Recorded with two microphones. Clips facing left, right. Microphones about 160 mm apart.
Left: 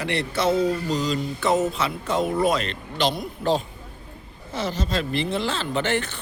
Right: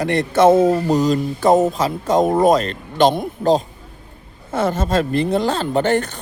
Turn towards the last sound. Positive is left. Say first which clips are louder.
# right 7 dB
turn(degrees=-45)  # may be behind; listen again after turning